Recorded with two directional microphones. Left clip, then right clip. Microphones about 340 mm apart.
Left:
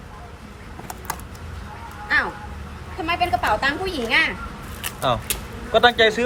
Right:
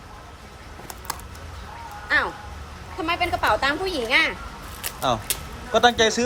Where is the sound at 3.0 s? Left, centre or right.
Centre.